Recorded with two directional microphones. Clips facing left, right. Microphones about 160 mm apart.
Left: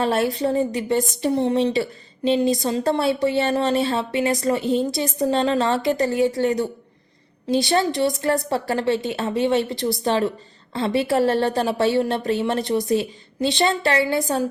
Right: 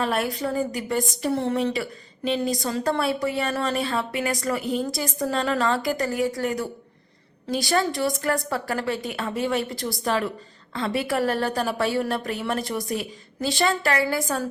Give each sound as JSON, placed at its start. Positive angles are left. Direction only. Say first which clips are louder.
{"t": 0.0, "sound": "a woman's voice", "louder": "left 5 dB", "side_deg": 25}